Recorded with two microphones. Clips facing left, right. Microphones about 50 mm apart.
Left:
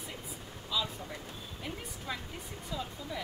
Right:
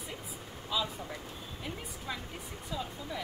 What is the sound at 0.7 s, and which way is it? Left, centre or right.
Speech, right.